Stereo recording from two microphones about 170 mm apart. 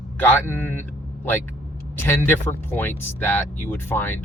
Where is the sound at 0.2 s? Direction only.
15° left (ahead or behind).